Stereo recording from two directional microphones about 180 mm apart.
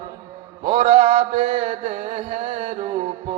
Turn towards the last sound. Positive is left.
turn(degrees=-35)  # may be behind; listen again after turning